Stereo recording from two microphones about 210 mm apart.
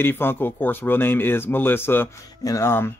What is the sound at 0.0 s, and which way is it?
A man's voice, 10° left (ahead or behind).